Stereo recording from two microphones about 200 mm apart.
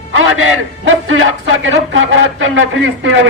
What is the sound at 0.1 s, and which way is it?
A man's voice, 90° right.